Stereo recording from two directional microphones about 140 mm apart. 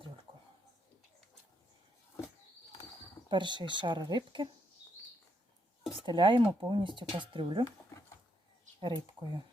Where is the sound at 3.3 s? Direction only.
35° right (ahead or behind).